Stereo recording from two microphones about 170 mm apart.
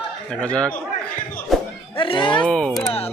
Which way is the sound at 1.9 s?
30° left (ahead or behind).